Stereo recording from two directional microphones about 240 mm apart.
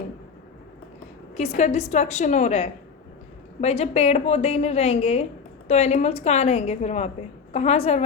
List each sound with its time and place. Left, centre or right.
1.4 s a woman's voice: left